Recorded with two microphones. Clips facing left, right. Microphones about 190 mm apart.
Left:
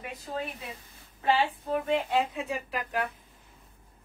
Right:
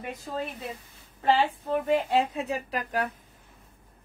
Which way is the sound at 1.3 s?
40° right (ahead or behind).